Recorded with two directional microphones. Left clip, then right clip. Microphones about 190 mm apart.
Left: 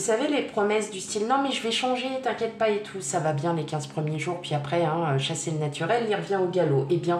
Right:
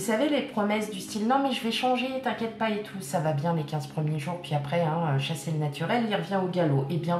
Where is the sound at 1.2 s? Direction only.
35° left (ahead or behind).